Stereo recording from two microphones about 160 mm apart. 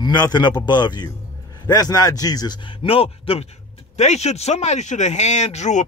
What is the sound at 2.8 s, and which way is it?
A man's voice, 35° left (ahead or behind).